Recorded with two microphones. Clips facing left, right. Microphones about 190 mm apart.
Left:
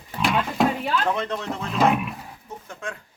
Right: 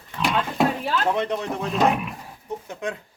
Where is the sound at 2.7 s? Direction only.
20° right (ahead or behind).